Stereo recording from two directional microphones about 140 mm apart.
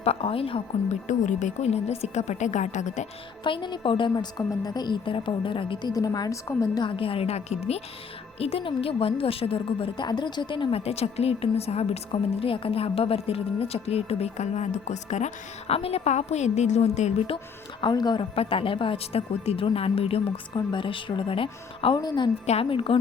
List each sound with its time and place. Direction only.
0.0 s a woman's voice: 45° left (ahead or behind)
1.0 s a woman's voice: 60° left (ahead or behind)
3.4 s a woman's voice: 35° left (ahead or behind)
22.4 s a woman's voice: 45° left (ahead or behind)